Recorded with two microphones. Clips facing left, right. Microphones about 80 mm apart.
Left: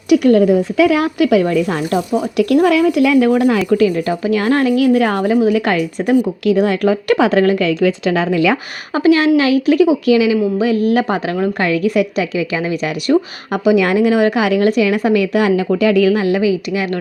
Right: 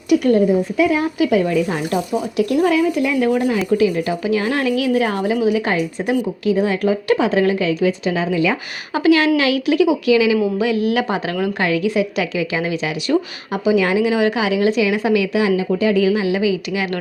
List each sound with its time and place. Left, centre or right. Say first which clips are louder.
0.1 s a woman's voice: left 4 dB; left
0.8 s a woman's voice: left 4 dB; left
2.6 s a woman's voice: left 4 dB; left
7.3 s a woman's voice: left 3 dB; left
7.9 s a woman's voice: left 3 dB; left
9.0 s speech: left 3 dB; left
13.1 s a woman's voice: left 5 dB; left
16.1 s a woman's voice: left 3 dB; left